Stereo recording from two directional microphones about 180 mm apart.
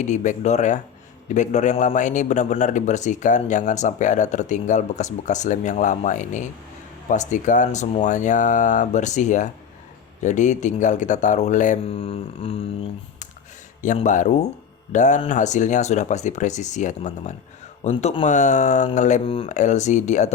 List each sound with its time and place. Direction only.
0.0 s a man's voice: 45° left (ahead or behind)
13.8 s a man's voice: 45° left (ahead or behind)